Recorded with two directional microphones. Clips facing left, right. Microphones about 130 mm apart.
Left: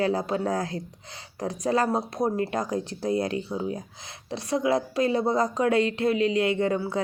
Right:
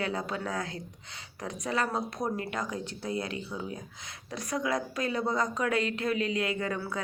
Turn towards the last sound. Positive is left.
turn(degrees=30)  # may be behind; listen again after turning